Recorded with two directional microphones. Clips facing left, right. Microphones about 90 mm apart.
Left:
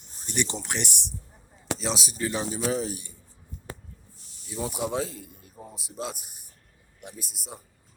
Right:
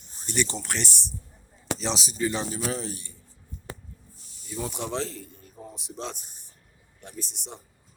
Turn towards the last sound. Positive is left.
turn(degrees=5)  # may be behind; listen again after turning